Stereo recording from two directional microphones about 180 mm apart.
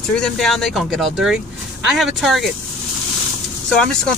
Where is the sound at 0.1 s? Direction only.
Centre (ahead or behind).